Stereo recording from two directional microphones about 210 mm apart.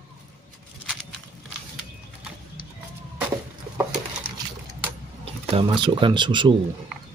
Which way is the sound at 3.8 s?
10° right (ahead or behind).